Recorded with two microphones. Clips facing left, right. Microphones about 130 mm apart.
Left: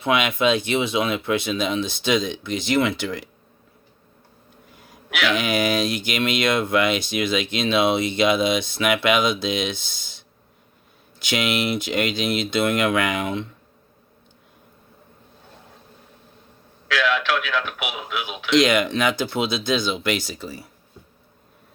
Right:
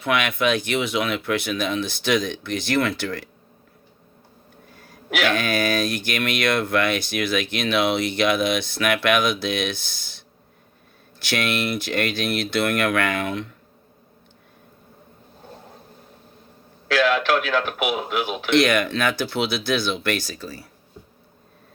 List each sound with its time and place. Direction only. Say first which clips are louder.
0.0 s speech: left 2 dB; 20° left (ahead or behind)
4.7 s a sound: even; 20° left (ahead or behind)
5.3 s speech: left 4 dB; 20° left (ahead or behind)
16.9 s speech: right 3 dB; 35° right (ahead or behind)
18.6 s speech: left 1 dB; 20° left (ahead or behind)